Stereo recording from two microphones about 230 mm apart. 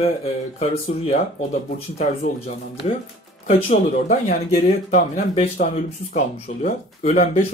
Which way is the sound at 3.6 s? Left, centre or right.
Left.